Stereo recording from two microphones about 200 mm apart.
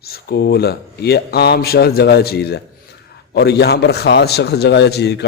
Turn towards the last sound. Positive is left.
turn(degrees=55)  # may be behind; listen again after turning